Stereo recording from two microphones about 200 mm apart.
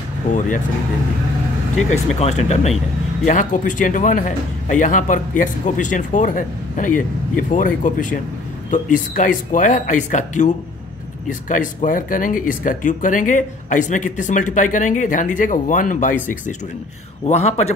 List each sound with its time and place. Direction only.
1.9 s speech: 35° left (ahead or behind)
17.3 s speech: 35° left (ahead or behind)